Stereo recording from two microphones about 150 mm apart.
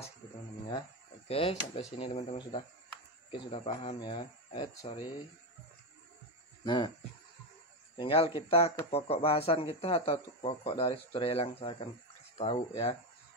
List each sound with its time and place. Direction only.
1.2 s speech: 40° left (ahead or behind)
6.6 s speech: 30° left (ahead or behind)
8.0 s speech: 35° left (ahead or behind)